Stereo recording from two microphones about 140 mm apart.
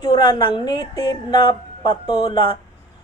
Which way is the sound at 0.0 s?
35° left (ahead or behind).